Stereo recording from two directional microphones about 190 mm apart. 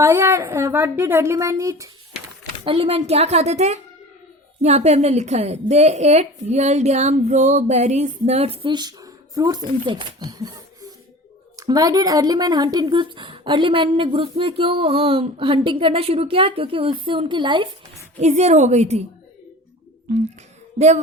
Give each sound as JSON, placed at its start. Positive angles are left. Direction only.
{"t": 0.0, "sound": "a woman's voice", "side_deg": -15}
{"t": 2.6, "sound": "a woman's voice", "side_deg": -30}
{"t": 18.2, "sound": "a woman's voice", "side_deg": -35}
{"t": 20.7, "sound": "a woman's voice", "side_deg": -35}